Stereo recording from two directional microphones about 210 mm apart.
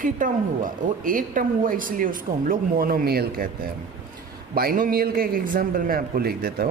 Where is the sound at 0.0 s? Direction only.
40° right (ahead or behind).